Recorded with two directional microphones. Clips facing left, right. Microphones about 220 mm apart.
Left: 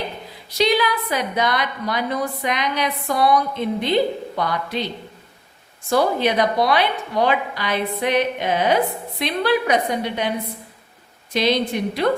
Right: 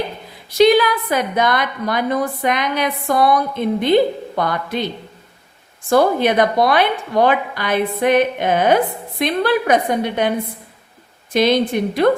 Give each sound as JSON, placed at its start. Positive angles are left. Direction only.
{"t": 0.5, "sound": "a woman's voice", "side_deg": -50}
{"t": 5.9, "sound": "a woman's voice", "side_deg": -50}
{"t": 11.3, "sound": "a woman's voice", "side_deg": -50}